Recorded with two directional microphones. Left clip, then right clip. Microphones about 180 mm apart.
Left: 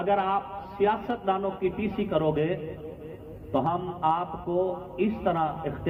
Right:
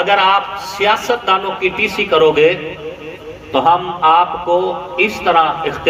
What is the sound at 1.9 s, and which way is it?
Speech, 45° left (ahead or behind).